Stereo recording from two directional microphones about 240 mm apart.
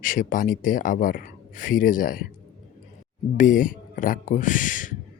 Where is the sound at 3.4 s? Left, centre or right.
Left.